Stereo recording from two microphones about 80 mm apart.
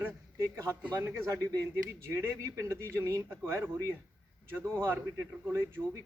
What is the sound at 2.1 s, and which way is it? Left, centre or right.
A man's voice, right.